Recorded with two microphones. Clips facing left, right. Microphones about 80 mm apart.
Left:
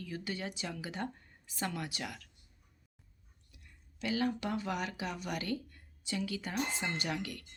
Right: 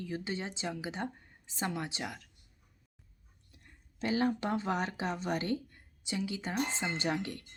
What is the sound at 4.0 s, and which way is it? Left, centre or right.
Speech, right.